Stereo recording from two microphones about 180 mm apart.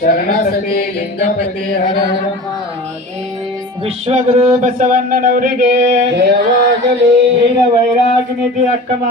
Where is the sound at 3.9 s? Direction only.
35° right (ahead or behind).